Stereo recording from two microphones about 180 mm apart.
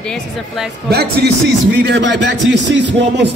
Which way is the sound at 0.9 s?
65° right (ahead or behind).